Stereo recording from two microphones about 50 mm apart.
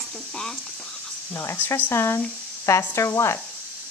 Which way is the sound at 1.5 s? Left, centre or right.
Left.